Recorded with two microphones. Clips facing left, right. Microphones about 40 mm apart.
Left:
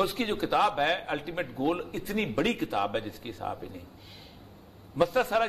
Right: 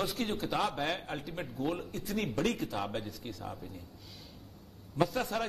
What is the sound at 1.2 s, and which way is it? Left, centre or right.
A man's voice, left.